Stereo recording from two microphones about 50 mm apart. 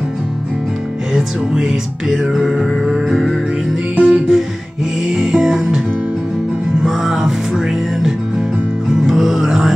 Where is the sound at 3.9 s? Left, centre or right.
Right.